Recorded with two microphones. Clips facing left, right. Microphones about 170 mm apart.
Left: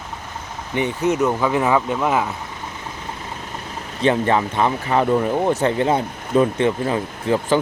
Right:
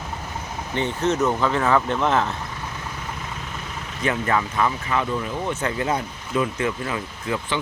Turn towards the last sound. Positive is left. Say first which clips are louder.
# left 8 dB
turn(degrees=35)  # may be behind; listen again after turning